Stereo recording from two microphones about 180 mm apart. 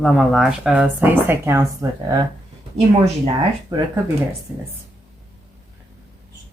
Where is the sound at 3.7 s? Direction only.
20° right (ahead or behind).